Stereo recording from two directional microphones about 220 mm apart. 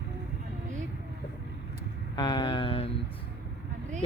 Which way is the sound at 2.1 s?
20° left (ahead or behind).